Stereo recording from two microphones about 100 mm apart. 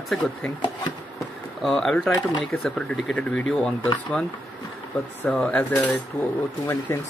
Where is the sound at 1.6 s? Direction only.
5° left (ahead or behind).